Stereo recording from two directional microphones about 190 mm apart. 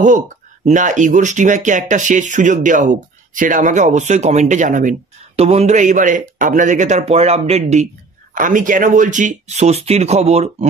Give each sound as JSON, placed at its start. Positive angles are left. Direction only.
{"t": 0.7, "sound": "speech", "side_deg": -40}